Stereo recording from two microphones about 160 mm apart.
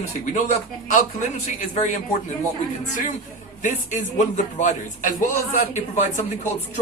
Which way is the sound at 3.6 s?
50° left (ahead or behind).